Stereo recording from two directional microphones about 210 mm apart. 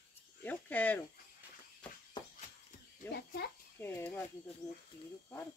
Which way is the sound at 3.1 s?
50° left (ahead or behind).